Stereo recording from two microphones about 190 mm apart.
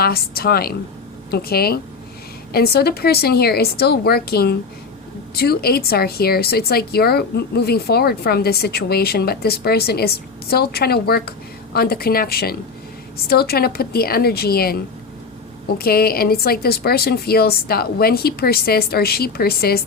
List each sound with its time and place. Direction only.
0.0 s a woman's voice: 55° left (ahead or behind)